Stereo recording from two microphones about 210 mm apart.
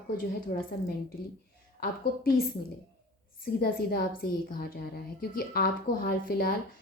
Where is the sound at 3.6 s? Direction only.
45° left (ahead or behind).